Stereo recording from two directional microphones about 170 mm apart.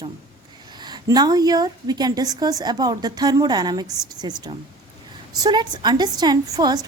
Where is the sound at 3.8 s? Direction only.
5° right (ahead or behind).